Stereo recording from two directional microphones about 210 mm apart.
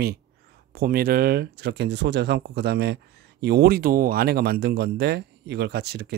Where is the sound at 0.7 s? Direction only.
45° right (ahead or behind).